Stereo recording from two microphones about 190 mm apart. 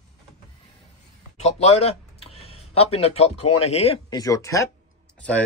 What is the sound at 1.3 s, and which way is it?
Speech, 35° left (ahead or behind).